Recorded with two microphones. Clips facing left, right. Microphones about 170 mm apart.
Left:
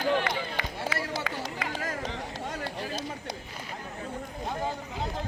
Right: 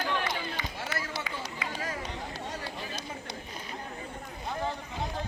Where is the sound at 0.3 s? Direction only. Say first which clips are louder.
Left 3 dB; 70° left (ahead or behind).